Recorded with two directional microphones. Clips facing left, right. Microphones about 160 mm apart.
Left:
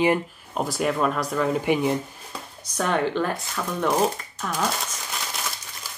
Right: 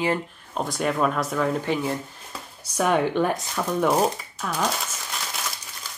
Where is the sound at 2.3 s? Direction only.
10° right (ahead or behind).